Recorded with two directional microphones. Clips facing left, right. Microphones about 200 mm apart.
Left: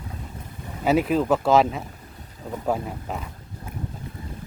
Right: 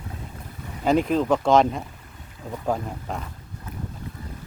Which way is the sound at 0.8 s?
5° left (ahead or behind).